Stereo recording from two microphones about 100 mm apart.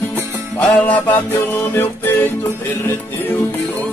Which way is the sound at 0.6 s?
15° left (ahead or behind).